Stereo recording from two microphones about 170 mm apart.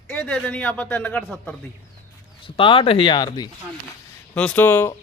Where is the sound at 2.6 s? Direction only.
30° left (ahead or behind).